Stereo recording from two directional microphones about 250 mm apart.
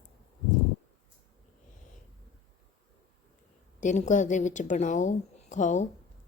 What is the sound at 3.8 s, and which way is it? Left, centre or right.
A woman's voice, left.